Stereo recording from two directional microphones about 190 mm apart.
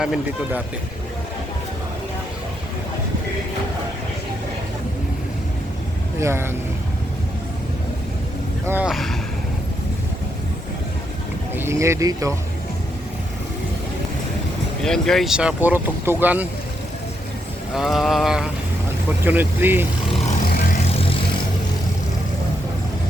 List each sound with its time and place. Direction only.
0.0 s speech: 5° right (ahead or behind)
6.1 s speech: 15° right (ahead or behind)
8.6 s speech: 10° right (ahead or behind)
11.5 s speech: 15° right (ahead or behind)
14.8 s speech: 5° left (ahead or behind)
17.7 s speech: centre (ahead or behind)
20.9 s vehicle: 30° left (ahead or behind)